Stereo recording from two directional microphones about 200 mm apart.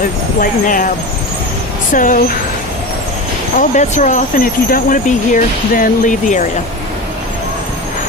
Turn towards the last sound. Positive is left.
turn(degrees=40)  # may be behind; listen again after turning